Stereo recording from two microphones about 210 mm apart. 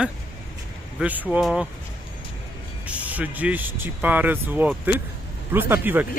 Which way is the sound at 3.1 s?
5° right (ahead or behind).